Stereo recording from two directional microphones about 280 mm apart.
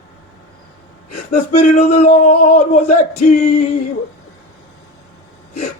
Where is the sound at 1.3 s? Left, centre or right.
Left.